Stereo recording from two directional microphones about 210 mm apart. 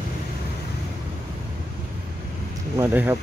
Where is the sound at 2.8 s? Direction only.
10° right (ahead or behind).